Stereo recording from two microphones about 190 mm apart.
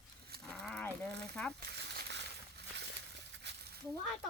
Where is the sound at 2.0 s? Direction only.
65° right (ahead or behind).